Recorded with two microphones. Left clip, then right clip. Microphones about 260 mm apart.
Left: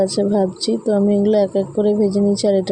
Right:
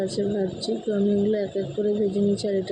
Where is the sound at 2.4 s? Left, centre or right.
Left.